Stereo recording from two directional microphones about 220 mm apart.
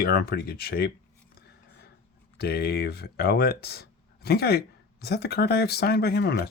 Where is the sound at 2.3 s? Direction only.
45° left (ahead or behind).